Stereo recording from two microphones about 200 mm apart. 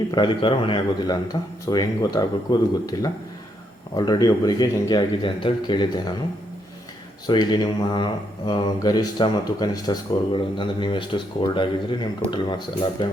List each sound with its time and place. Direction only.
0.1 s speech: 25° left (ahead or behind)
7.3 s speech: 20° left (ahead or behind)